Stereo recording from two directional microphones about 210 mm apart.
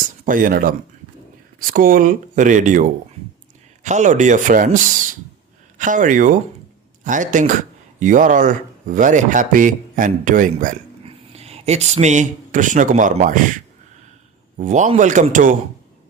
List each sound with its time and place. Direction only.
0.3 s speech: 40° right (ahead or behind)
3.8 s speech: 35° right (ahead or behind)
14.6 s speech: 35° right (ahead or behind)